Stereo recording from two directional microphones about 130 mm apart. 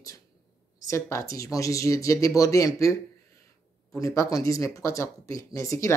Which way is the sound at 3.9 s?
20° left (ahead or behind).